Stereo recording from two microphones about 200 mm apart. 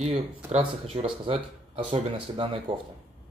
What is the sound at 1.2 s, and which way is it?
Speech, 25° right (ahead or behind).